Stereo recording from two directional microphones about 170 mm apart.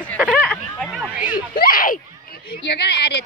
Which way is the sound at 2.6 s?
80° left.